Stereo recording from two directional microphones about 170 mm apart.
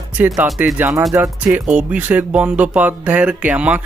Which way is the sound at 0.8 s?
15° right (ahead or behind).